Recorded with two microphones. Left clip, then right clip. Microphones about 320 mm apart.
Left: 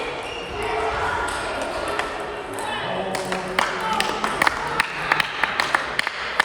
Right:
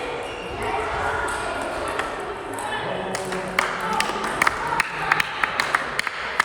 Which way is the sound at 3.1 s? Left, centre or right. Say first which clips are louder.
Left 2 dB; left.